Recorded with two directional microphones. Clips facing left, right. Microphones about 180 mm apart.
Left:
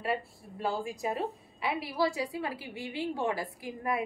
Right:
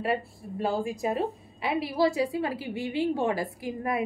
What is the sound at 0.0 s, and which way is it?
A woman's voice, 25° right (ahead or behind).